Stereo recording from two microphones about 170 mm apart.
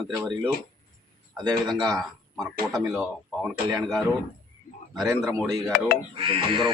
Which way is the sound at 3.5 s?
20° right (ahead or behind).